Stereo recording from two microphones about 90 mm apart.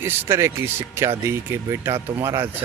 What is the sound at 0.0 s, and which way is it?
Speech, 25° right (ahead or behind).